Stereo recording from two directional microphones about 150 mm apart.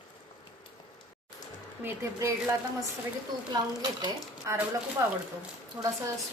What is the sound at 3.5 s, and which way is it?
Speech, 25° right (ahead or behind).